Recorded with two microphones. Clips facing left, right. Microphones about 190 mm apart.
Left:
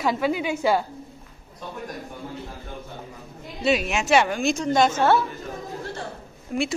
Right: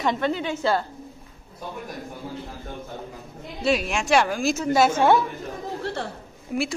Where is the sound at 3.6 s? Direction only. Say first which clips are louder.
Left 1 dB; centre (ahead or behind).